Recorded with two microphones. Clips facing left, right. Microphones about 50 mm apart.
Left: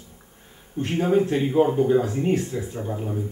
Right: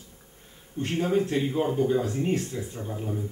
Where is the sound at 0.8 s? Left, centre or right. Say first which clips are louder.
Left 4 dB; centre.